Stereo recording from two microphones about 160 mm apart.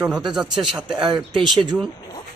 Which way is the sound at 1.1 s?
30° right (ahead or behind).